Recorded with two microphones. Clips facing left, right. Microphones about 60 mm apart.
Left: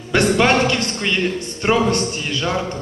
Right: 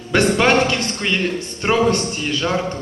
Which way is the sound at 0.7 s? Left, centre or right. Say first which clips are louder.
Left 1 dB; right.